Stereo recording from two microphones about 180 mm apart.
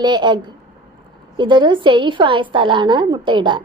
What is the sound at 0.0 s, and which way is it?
A woman's voice, 25° right (ahead or behind).